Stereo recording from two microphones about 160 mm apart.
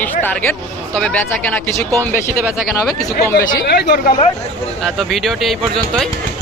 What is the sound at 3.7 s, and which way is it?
Speech, 85° left.